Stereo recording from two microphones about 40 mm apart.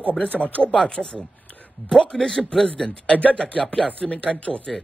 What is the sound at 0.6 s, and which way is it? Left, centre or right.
A man's voice, left.